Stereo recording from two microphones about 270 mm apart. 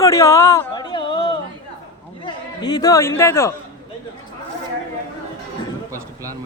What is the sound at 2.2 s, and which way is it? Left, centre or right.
Speech, centre.